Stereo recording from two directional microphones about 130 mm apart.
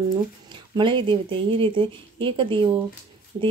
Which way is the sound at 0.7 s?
40° right (ahead or behind).